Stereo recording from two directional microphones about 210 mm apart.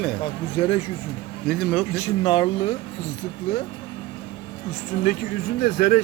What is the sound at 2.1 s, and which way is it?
Speech, 25° left (ahead or behind).